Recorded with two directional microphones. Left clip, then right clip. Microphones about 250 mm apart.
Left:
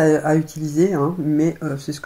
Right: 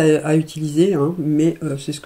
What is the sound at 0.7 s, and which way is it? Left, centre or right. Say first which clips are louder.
Speech: right 2 dB; right.